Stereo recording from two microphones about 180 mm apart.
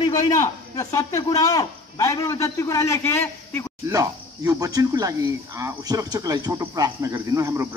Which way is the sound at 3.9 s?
15° right (ahead or behind).